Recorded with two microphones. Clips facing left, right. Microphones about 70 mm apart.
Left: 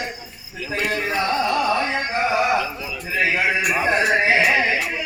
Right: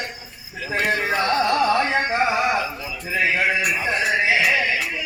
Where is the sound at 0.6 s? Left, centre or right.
Right.